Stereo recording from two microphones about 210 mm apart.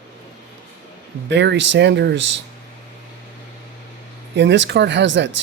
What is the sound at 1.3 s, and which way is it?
Speech, 55° right (ahead or behind).